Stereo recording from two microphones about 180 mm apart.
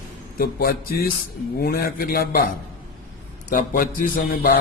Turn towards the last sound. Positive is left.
turn(degrees=50)  # may be behind; listen again after turning